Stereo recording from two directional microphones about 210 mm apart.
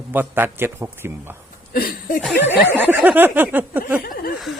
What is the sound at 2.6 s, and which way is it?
Speech, 10° right (ahead or behind).